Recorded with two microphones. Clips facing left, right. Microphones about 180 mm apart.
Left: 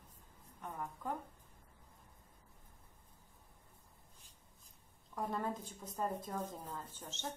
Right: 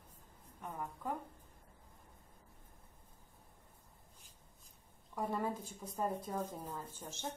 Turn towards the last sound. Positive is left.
turn(degrees=-10)  # may be behind; listen again after turning